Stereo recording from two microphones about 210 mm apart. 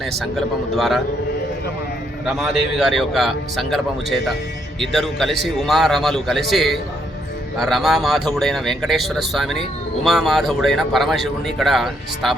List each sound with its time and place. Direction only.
0.0 s speech: centre (ahead or behind)
2.2 s speech: 5° right (ahead or behind)